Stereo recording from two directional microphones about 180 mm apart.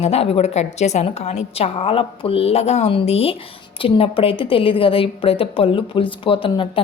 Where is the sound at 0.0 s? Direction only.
35° left (ahead or behind).